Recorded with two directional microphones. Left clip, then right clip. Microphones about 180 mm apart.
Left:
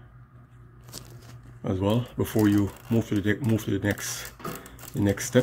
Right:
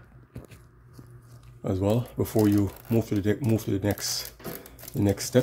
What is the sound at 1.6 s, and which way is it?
Speech, 5° right (ahead or behind).